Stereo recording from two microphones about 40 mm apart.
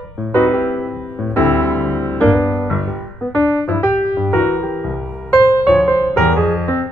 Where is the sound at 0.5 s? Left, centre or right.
Left.